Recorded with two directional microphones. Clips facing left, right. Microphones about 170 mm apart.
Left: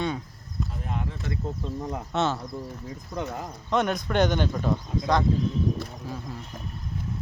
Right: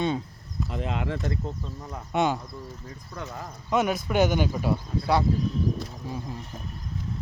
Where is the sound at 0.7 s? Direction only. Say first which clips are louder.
Right 7 dB; 90° right.